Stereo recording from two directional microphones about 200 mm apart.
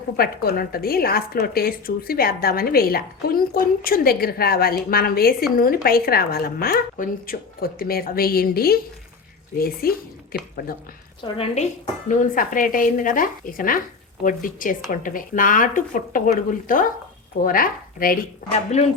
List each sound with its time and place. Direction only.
0.2 s a woman's voice: 50° left (ahead or behind)
11.2 s dishes: 30° left (ahead or behind)
14.3 s a woman's voice: 40° left (ahead or behind)